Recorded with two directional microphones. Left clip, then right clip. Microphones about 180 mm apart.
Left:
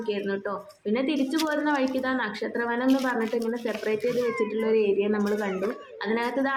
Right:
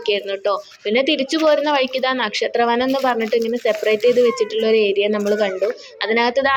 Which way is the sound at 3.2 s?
45° right (ahead or behind).